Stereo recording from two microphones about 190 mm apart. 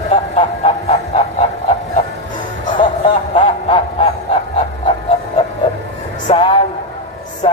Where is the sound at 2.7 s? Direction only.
25° left (ahead or behind).